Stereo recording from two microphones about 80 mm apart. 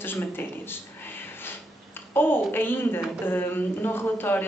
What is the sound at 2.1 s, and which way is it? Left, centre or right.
Speech, left.